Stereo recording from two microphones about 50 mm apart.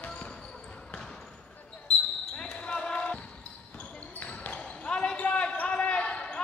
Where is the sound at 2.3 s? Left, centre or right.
Centre.